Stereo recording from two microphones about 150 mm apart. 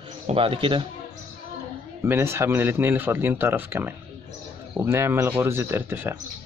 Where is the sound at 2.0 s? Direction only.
15° right (ahead or behind).